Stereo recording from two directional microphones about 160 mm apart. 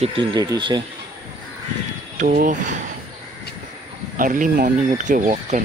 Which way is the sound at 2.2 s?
60° right (ahead or behind).